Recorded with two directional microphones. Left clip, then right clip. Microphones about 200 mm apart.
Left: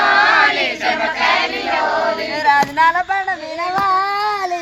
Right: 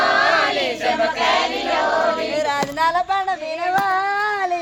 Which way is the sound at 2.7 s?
45° right (ahead or behind).